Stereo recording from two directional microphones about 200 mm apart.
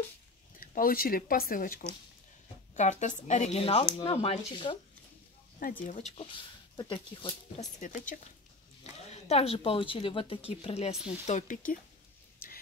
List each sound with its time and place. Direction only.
0.6 s a woman's voice: 45° left (ahead or behind); by 4.7 s 30° left (ahead or behind)
5.6 s a woman's voice: 45° left (ahead or behind)